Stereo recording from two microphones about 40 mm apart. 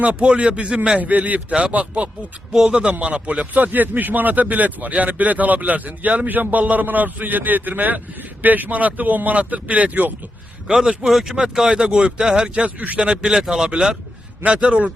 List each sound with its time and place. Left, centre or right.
0.0 s a man's voice: right
0.9 s a man's voice: right
2.5 s a man's voice: centre
3.5 s speech: right
11.1 s speech: centre
11.7 s a man's voice: right